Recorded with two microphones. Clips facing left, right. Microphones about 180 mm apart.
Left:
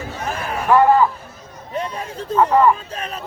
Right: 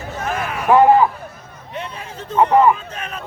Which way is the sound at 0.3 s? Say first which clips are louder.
Right 1 dB; 35° left (ahead or behind).